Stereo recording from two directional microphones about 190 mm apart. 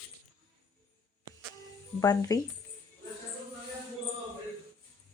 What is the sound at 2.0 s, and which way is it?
Speech, 15° left (ahead or behind).